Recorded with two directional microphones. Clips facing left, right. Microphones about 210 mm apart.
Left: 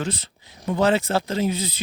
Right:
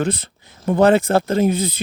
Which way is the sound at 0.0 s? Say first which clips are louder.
Right 7 dB; 55° right (ahead or behind).